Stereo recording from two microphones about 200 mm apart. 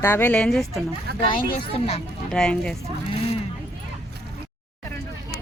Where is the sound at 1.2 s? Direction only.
30° left (ahead or behind).